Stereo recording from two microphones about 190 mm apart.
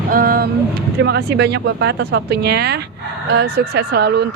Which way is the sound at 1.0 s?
60° right (ahead or behind).